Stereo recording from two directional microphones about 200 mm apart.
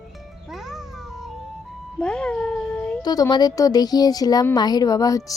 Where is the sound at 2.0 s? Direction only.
5° left (ahead or behind).